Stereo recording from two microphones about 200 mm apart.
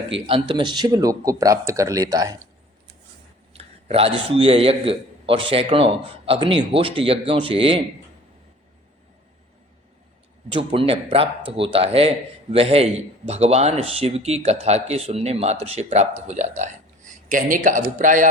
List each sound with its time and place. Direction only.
0.3 s speech: 25° right (ahead or behind)
3.5 s a man's voice: 30° right (ahead or behind)
10.5 s a man's voice: 25° right (ahead or behind)